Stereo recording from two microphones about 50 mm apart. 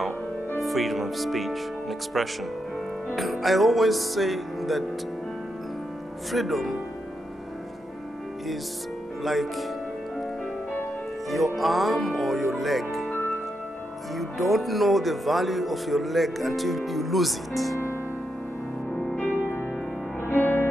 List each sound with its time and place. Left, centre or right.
0.6 s speech: centre
6.3 s speech: centre
9.2 s speech: centre
11.2 s speech: centre
14.1 s speech: centre
19.4 s music: left